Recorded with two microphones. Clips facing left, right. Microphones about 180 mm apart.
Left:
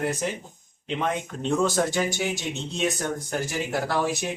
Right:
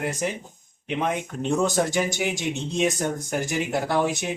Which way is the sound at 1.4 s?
15° right (ahead or behind).